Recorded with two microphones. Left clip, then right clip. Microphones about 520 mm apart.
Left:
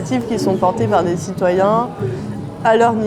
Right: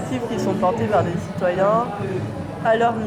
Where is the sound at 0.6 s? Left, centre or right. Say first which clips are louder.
Left 3 dB; left.